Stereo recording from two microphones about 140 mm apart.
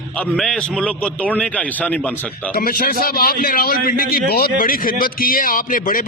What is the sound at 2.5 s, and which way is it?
A man's voice, 90° left.